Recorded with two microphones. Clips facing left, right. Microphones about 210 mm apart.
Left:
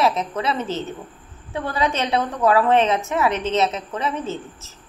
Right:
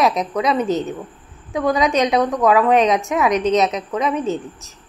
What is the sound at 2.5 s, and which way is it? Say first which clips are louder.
A woman's voice: right 1 dB; 15° right (ahead or behind).